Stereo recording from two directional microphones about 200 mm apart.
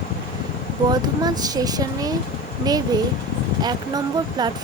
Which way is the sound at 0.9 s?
20° right (ahead or behind).